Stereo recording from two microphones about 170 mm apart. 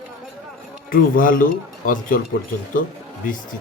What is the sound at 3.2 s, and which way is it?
Speech, 50° left (ahead or behind).